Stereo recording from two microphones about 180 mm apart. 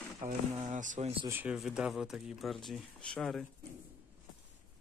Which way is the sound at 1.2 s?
10° right (ahead or behind).